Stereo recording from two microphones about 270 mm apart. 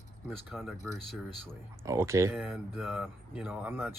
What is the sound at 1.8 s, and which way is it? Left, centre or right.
Speech, centre.